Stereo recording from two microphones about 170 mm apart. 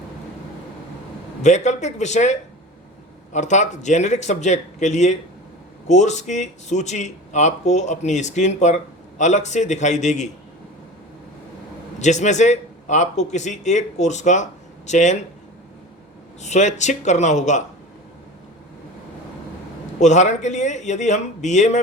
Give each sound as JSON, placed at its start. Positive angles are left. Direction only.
{"t": 1.4, "sound": "speech", "side_deg": 45}
{"t": 11.9, "sound": "speech", "side_deg": 45}
{"t": 16.4, "sound": "speech", "side_deg": 45}
{"t": 20.0, "sound": "speech", "side_deg": 45}